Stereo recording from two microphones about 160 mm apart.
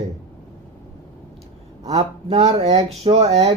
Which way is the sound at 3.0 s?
40° right (ahead or behind).